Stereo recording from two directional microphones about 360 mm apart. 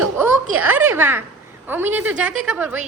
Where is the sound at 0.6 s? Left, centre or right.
Centre.